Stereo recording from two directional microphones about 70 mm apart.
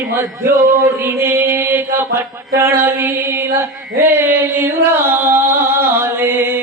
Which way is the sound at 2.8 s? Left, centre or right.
Right.